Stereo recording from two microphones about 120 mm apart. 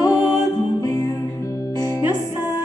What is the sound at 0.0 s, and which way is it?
Music, 30° left (ahead or behind).